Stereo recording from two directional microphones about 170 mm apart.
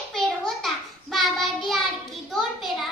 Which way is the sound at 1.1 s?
Centre (ahead or behind).